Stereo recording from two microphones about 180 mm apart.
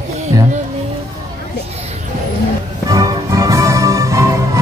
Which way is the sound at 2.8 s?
20° right (ahead or behind).